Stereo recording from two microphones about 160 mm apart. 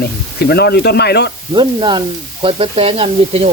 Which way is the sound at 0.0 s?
85° left.